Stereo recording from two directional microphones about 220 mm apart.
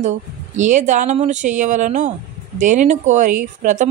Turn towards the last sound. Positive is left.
turn(degrees=-35)  # may be behind; listen again after turning